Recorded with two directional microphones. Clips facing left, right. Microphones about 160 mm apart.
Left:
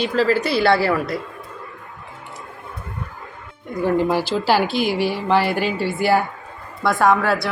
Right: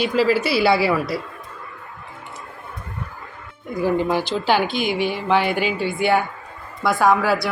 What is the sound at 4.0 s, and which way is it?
A woman's voice, 5° left (ahead or behind).